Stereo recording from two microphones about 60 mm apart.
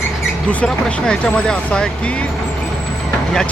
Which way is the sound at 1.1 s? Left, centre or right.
Centre.